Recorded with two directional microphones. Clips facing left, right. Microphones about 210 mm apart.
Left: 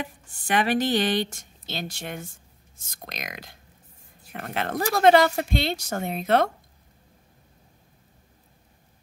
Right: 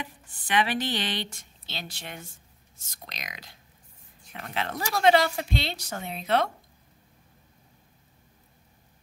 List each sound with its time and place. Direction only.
0.0 s a woman's voice: 45° left (ahead or behind)